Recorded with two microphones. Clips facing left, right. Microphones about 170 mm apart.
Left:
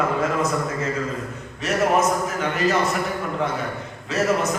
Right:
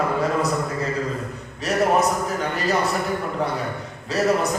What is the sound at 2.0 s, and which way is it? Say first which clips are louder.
Speech: even; 35° right (ahead or behind).